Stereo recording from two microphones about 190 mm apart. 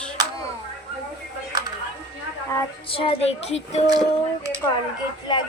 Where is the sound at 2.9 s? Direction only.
30° left (ahead or behind).